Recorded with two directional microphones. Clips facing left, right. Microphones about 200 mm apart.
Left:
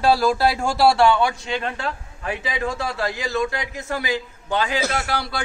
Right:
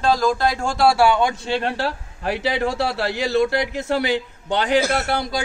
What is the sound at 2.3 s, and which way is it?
A man's voice, 80° right.